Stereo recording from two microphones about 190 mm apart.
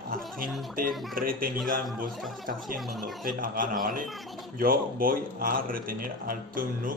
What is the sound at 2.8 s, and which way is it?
Speech, centre (ahead or behind).